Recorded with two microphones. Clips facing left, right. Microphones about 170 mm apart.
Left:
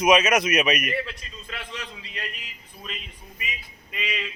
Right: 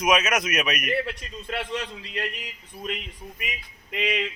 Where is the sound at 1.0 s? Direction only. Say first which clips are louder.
Right 6 dB; 45° right (ahead or behind).